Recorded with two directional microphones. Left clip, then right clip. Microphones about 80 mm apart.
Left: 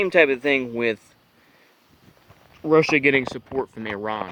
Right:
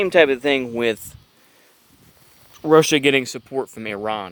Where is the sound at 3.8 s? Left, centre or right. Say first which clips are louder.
Right 2 dB; right.